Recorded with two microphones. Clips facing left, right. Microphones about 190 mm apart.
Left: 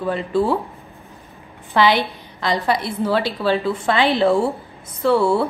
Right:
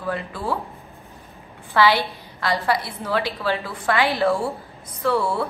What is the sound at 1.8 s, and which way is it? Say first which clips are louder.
A woman's voice: left 2 dB; 20° left (ahead or behind).